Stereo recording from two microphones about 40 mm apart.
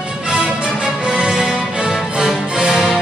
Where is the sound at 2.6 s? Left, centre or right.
Centre.